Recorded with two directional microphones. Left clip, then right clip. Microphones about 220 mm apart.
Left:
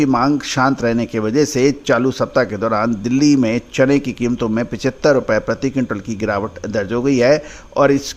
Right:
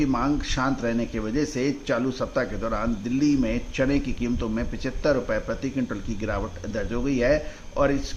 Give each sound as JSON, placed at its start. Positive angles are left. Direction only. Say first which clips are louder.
{"t": 0.0, "sound": "a man's voice", "louder": "left 9 dB", "side_deg": 40}